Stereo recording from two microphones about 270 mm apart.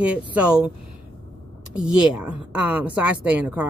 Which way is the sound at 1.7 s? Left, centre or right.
Centre.